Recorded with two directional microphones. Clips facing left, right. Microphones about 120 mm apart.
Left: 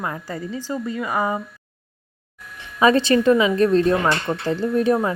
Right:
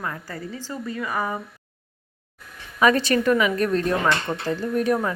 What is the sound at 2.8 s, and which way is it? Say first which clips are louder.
A woman's voice: left 3 dB; 25° left (ahead or behind).